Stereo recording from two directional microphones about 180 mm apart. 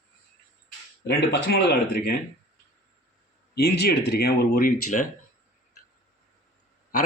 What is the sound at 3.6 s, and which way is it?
Speech, 60° left (ahead or behind).